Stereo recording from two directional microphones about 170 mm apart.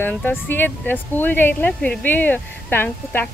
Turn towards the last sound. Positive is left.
turn(degrees=10)  # may be behind; listen again after turning